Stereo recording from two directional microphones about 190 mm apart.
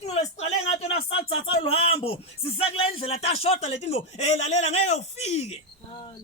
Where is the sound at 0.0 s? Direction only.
35° left (ahead or behind).